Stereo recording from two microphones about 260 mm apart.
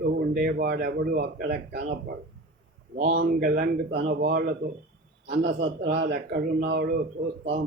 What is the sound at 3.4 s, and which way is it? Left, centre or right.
Speech, right.